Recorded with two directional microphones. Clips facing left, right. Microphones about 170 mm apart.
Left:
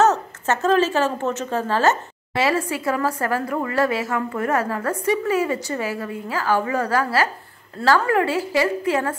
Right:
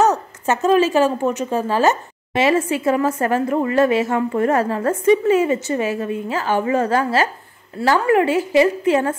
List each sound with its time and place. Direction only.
0.0 s a woman's voice: 15° right (ahead or behind)